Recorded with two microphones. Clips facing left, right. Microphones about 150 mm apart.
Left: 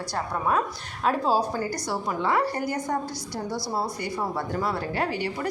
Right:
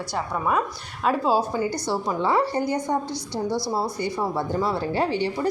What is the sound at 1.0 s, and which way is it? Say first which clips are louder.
Speech: right 2 dB; 5° right (ahead or behind).